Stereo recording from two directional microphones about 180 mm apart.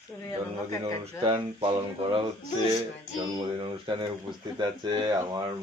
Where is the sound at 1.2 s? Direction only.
30° right (ahead or behind).